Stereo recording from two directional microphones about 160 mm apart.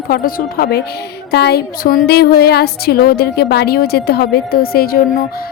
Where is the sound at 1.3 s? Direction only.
90° left.